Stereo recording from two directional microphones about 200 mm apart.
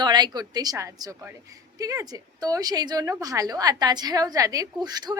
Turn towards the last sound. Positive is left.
turn(degrees=-20)  # may be behind; listen again after turning